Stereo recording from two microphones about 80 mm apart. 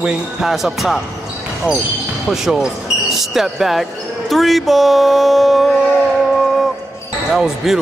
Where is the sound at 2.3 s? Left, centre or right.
Centre.